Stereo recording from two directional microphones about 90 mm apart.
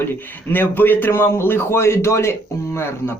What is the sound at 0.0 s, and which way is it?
A man's voice, 25° left (ahead or behind).